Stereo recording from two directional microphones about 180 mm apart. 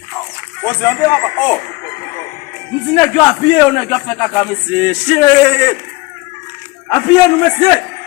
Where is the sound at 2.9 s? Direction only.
15° left (ahead or behind).